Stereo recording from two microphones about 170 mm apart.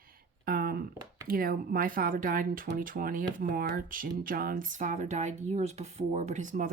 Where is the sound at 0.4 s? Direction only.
60° right (ahead or behind).